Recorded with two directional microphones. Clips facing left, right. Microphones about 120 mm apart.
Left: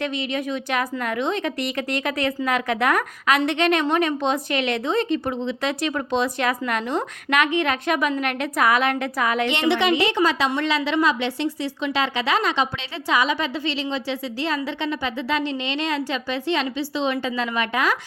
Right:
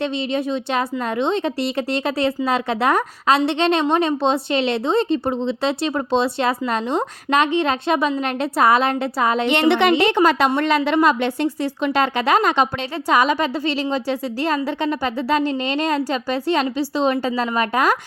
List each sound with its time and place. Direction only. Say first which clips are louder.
0.0 s a woman's voice: right 4 dB; 30° right (ahead or behind)
9.5 s a woman's voice: right 6 dB; 55° right (ahead or behind); by 17.9 s 40° right (ahead or behind)